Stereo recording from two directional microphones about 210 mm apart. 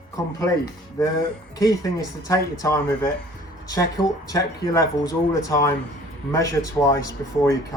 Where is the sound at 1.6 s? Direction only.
15° left (ahead or behind).